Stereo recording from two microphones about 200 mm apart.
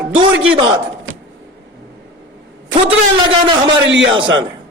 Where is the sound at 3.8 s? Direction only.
65° right (ahead or behind).